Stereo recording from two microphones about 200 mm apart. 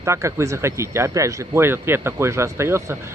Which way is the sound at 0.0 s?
15° right (ahead or behind).